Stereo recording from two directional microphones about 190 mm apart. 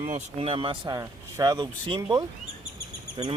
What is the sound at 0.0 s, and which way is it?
Speech, 35° right (ahead or behind).